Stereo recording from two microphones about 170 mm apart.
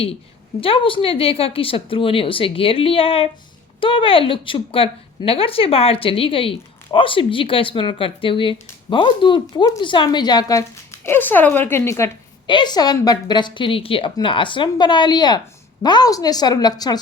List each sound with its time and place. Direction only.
0.6 s speech: 30° left (ahead or behind); by 12.1 s 15° left (ahead or behind)
12.5 s speech: 25° left (ahead or behind)